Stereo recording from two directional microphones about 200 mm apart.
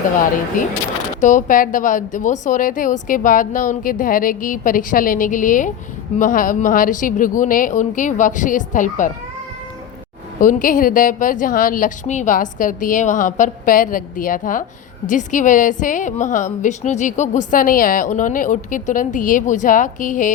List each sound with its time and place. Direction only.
0.6 s a woman's voice: 40° left (ahead or behind)
10.4 s a woman's voice: 40° left (ahead or behind)